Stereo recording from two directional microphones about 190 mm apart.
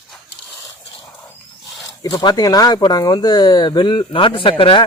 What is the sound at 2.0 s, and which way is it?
Speech, 20° left (ahead or behind).